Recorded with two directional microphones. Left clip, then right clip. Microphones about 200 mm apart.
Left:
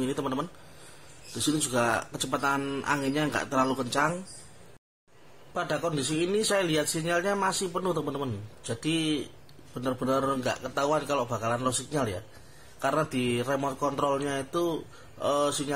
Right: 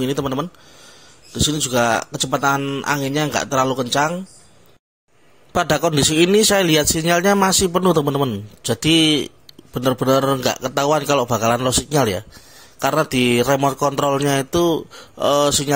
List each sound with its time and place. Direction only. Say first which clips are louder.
0.0 s speech: right 9 dB; 40° right (ahead or behind)
1.5 s speech: right 8 dB; 40° right (ahead or behind)
5.5 s a man's voice: right 12 dB; 50° right (ahead or behind)